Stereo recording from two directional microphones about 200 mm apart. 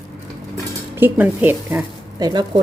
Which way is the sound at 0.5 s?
10° right (ahead or behind).